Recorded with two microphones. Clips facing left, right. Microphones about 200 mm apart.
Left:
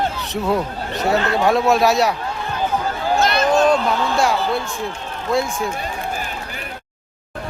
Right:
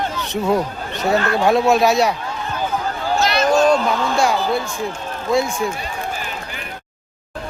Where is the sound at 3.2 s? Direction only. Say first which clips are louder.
Right 1 dB; 55° left (ahead or behind).